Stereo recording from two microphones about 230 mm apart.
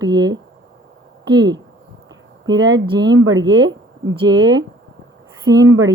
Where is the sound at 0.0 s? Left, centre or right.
Centre.